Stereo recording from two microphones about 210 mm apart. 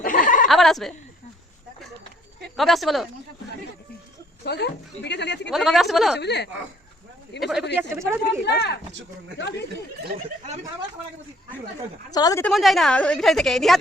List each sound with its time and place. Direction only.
0.0 s chuckle: 40° left (ahead or behind)
0.4 s a woman's voice: centre (ahead or behind)
2.6 s a woman's voice: centre (ahead or behind)
4.4 s speech: 50° left (ahead or behind)
5.5 s a woman's voice: centre (ahead or behind)
6.1 s speech: 55° left (ahead or behind)
7.3 s a woman's voice: centre (ahead or behind)
7.8 s speech: 10° right (ahead or behind)
8.4 s speech: 55° left (ahead or behind)
12.1 s a woman's voice: 15° left (ahead or behind)
12.5 s a woman's voice: centre (ahead or behind)